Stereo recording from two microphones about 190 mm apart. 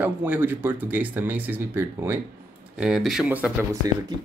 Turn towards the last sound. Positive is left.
turn(degrees=-20)  # may be behind; listen again after turning